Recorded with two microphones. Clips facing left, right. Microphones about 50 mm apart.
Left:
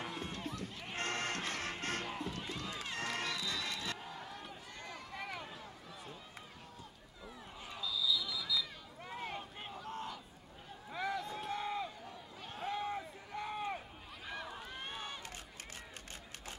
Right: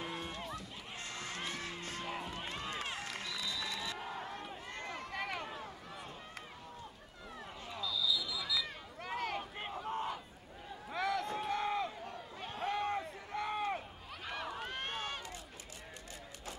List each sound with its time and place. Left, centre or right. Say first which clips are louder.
0.6 s music: left 4 dB; left
2.1 s run: even; right
3.0 s crowd: left 3 dB; left
4.0 s run: right 4 dB; right
7.8 s basketball bounce: even; centre
8.6 s a sound: right 5 dB; right
9.6 s crowd: right 5 dB; right
10.9 s run: right 3 dB; right
11.4 s a sound: right 3 dB; right
12.4 s run: right 3 dB; right